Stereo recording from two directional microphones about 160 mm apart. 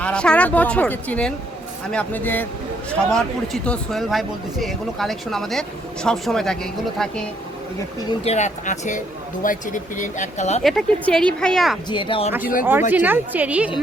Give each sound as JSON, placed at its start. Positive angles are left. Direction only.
{"t": 0.0, "sound": "speech", "side_deg": 5}
{"t": 8.2, "sound": "speech", "side_deg": 45}
{"t": 10.6, "sound": "speech", "side_deg": 0}
{"t": 11.9, "sound": "speech", "side_deg": 30}
{"t": 12.4, "sound": "speech", "side_deg": 60}
{"t": 13.1, "sound": "a woman's voice", "side_deg": -10}